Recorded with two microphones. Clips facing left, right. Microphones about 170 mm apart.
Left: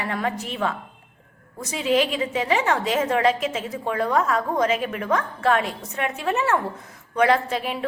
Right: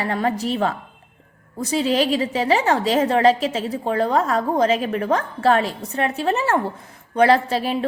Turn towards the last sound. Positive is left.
turn(degrees=-35)  # may be behind; listen again after turning